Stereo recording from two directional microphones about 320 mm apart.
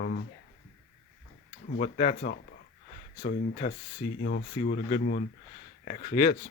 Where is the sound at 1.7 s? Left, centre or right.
Left.